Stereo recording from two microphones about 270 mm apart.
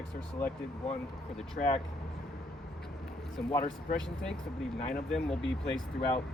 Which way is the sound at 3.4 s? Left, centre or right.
Centre.